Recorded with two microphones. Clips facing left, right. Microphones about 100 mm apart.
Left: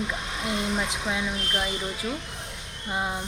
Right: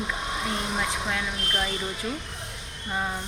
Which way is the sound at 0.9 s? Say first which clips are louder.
Left 1 dB; 15° left (ahead or behind).